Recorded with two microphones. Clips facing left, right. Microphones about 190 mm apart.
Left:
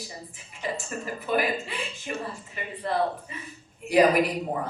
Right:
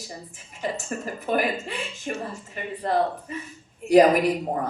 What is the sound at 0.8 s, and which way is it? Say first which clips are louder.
A woman's voice: right 2 dB; 45° right (ahead or behind).